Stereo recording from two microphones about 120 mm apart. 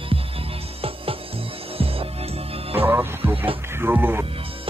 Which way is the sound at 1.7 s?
50° right (ahead or behind).